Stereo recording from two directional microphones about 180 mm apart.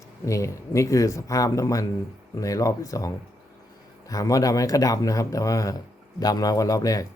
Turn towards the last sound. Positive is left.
turn(degrees=20)  # may be behind; listen again after turning